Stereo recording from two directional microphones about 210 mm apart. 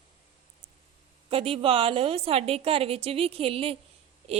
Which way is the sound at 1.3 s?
25° right (ahead or behind).